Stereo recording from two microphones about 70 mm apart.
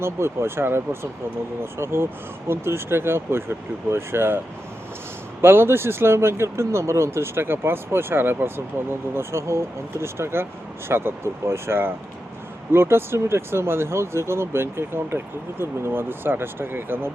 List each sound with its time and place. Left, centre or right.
0.0 s speech: right
1.8 s speech: right
5.4 s speech: right